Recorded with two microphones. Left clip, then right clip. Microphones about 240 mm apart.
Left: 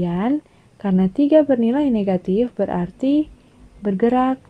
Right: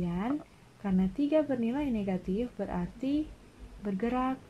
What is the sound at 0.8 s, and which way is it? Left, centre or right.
Speech, left.